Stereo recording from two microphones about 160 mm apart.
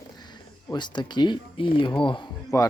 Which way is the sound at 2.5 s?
20° left (ahead or behind).